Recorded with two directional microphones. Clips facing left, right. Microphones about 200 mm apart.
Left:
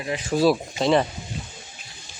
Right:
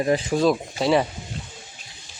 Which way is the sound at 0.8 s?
5° right (ahead or behind).